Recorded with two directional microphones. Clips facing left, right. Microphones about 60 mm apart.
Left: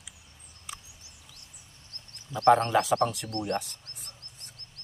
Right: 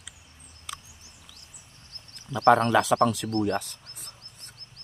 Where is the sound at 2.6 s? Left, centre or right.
Right.